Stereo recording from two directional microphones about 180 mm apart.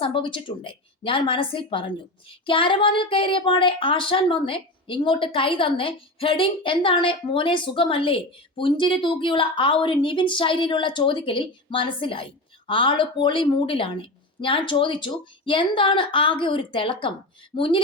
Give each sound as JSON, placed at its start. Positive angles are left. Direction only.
{"t": 0.0, "sound": "a woman's voice", "side_deg": 30}